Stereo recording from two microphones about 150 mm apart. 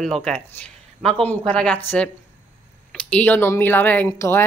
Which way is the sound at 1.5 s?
5° left (ahead or behind).